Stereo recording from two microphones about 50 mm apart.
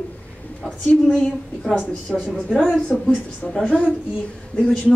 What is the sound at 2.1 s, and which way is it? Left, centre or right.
Speech, centre.